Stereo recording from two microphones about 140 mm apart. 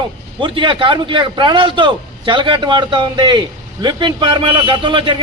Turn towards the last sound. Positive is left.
turn(degrees=-35)  # may be behind; listen again after turning